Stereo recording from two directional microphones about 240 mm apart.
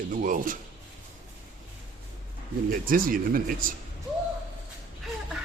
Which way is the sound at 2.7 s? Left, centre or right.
Right.